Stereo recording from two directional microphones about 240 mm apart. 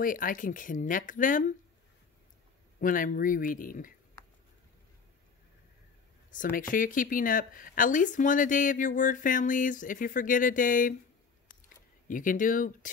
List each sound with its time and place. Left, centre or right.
0.0 s speech: left
2.8 s speech: left
6.3 s speech: left
12.1 s speech: left